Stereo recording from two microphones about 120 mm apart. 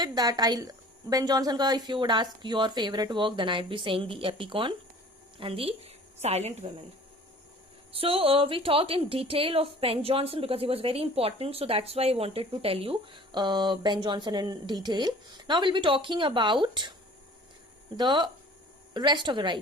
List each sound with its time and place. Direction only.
0.0 s a woman's voice: 35° right (ahead or behind); by 6.7 s 65° right (ahead or behind)
7.9 s a woman's voice: 50° right (ahead or behind)
17.9 s a woman's voice: 40° right (ahead or behind)